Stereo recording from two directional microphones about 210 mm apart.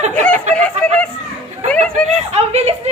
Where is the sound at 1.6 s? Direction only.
35° right (ahead or behind).